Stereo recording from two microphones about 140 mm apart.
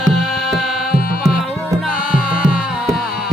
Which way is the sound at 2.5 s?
5° right (ahead or behind).